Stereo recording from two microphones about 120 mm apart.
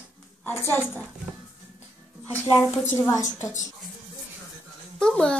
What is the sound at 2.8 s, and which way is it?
Speech, 20° left (ahead or behind).